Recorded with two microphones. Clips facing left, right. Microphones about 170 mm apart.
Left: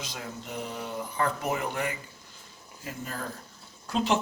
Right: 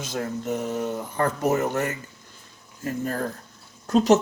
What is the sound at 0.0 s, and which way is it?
Speech, 50° right (ahead or behind).